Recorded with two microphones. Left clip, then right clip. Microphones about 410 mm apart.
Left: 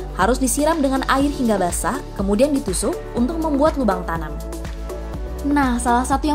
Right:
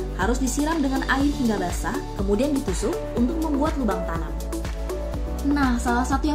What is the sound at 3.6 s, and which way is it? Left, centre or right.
Speech, left.